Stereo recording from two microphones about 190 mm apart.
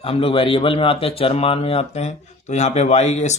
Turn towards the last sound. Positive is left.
turn(degrees=35)  # may be behind; listen again after turning